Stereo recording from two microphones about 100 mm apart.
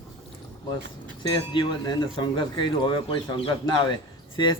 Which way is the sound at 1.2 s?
50° left (ahead or behind).